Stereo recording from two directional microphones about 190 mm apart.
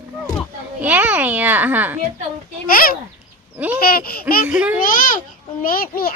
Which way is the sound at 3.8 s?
50° left (ahead or behind).